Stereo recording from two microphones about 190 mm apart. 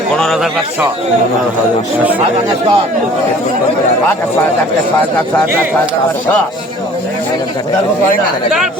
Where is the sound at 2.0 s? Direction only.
10° right (ahead or behind).